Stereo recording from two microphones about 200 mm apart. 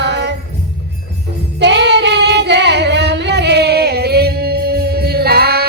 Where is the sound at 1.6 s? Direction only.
60° right (ahead or behind).